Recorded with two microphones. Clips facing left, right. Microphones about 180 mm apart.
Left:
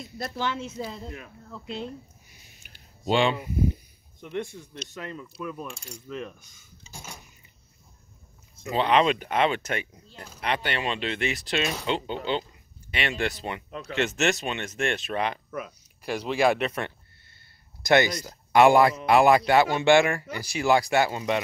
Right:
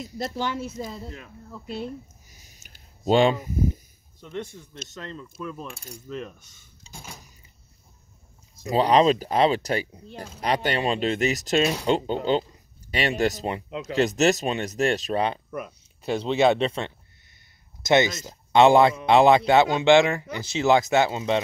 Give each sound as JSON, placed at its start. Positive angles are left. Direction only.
{"t": 0.2, "sound": "speech", "side_deg": -15}
{"t": 2.2, "sound": "a sound", "side_deg": -40}
{"t": 4.2, "sound": "speech", "side_deg": 15}
{"t": 5.7, "sound": "coin", "side_deg": 0}
{"t": 8.6, "sound": "speech", "side_deg": -35}
{"t": 11.8, "sound": "mechanisms", "side_deg": -45}
{"t": 13.2, "sound": "speech", "side_deg": -40}
{"t": 13.7, "sound": "speech", "side_deg": -20}
{"t": 13.9, "sound": "speech", "side_deg": -35}
{"t": 16.0, "sound": "speech", "side_deg": -25}